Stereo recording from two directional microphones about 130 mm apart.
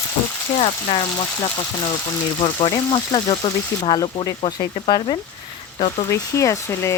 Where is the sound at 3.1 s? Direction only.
30° left (ahead or behind).